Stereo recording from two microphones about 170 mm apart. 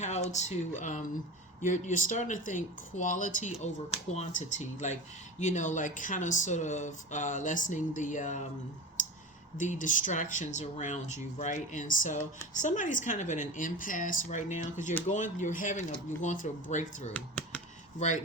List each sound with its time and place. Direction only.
0.0 s speech: 45° left (ahead or behind)
9.6 s speech: 50° left (ahead or behind)
17.2 s a sound: 5° left (ahead or behind)
18.0 s speech: 45° left (ahead or behind)